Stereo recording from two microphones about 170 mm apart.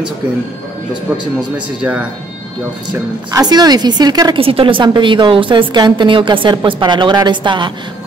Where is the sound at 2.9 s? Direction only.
25° right (ahead or behind).